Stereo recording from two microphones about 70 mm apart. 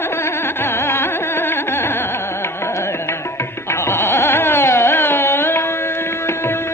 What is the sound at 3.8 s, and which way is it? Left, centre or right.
Music, left.